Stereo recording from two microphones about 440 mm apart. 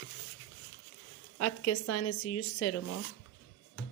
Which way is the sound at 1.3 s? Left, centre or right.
Left.